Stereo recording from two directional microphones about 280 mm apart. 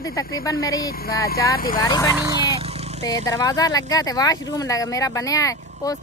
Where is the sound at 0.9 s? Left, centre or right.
Left.